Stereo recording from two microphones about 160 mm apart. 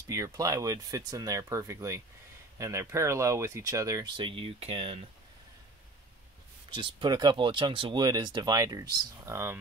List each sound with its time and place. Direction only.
0.0 s speech: 20° right (ahead or behind)
4.2 s speech: 35° right (ahead or behind)
6.7 s speech: 30° right (ahead or behind); by 9.6 s 15° right (ahead or behind)